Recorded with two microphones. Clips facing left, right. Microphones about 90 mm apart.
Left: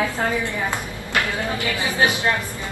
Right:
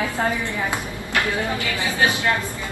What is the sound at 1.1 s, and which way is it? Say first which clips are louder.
Speech: right 1 dB; 20° left (ahead or behind).